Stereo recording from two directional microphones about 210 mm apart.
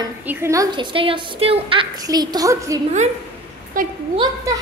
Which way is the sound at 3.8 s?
40° right (ahead or behind).